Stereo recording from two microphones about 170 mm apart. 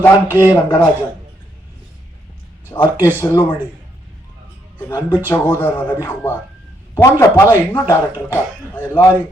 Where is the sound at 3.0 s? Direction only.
10° left (ahead or behind).